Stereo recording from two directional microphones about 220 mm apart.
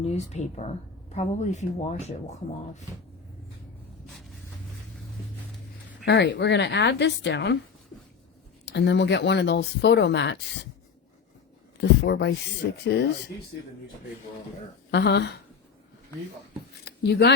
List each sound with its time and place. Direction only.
0.0 s speech: 30° left (ahead or behind)
6.1 s speech: 50° left (ahead or behind)
8.6 s speech: 50° left (ahead or behind)
11.8 s speech: 50° left (ahead or behind)
14.8 s speech: 50° left (ahead or behind)
16.8 s a sound: 50° left (ahead or behind)